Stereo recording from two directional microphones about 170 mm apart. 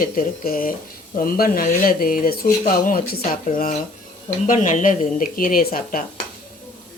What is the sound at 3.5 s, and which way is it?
A woman's voice, 50° left (ahead or behind).